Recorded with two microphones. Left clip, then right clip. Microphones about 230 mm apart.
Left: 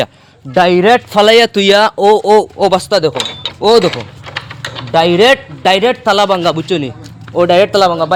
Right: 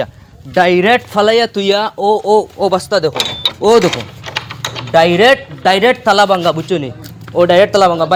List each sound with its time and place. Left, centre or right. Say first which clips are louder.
0.5 s speech: left 2 dB; left
3.6 s a man's voice: left 1 dB; centre